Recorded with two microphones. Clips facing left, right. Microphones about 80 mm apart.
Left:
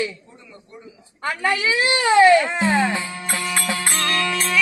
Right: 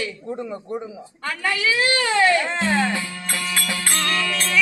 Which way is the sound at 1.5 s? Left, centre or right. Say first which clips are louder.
Left 1 dB; left.